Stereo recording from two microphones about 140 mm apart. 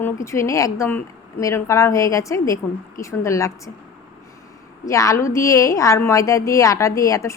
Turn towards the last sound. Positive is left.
turn(degrees=20)  # may be behind; listen again after turning